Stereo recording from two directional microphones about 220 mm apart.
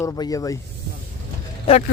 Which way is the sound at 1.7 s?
25° left (ahead or behind).